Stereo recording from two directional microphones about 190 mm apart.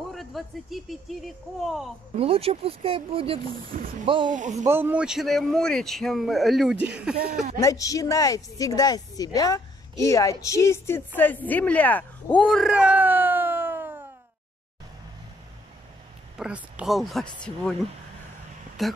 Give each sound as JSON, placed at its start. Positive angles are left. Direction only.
{"t": 0.1, "sound": "a man's voice", "side_deg": 0}
{"t": 2.1, "sound": "speech", "side_deg": -30}
{"t": 4.3, "sound": "speech", "side_deg": -40}
{"t": 4.6, "sound": "a man's voice", "side_deg": -10}
{"t": 7.6, "sound": "speech", "side_deg": 15}
{"t": 16.3, "sound": "a man's voice", "side_deg": -5}
{"t": 18.8, "sound": "a man's voice", "side_deg": 0}